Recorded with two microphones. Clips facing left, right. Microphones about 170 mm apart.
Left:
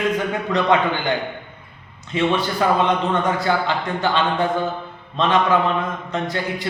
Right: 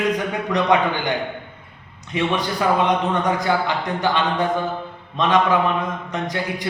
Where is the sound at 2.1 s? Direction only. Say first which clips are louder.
Left 2 dB; 15° right (ahead or behind).